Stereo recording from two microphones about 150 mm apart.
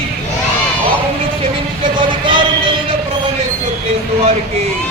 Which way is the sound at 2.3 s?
35° right (ahead or behind).